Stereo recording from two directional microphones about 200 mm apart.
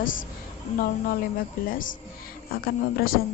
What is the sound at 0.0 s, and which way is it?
A woman's voice, 40° left (ahead or behind).